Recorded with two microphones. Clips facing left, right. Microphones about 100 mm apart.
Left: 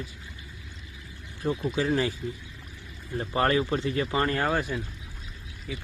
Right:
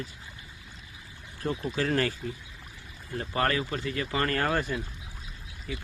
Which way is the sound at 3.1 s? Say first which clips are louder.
Left 3 dB; 25° left (ahead or behind).